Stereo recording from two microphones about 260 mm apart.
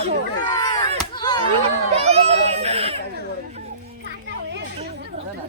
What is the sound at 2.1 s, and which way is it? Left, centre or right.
Baby cry, right.